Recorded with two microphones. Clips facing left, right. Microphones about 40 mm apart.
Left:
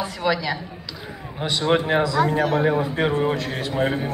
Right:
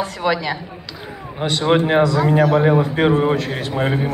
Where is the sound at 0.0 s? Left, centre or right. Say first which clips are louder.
Right 3 dB; right.